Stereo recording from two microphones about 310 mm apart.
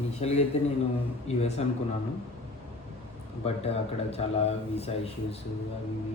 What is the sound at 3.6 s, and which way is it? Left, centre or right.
Speech, centre.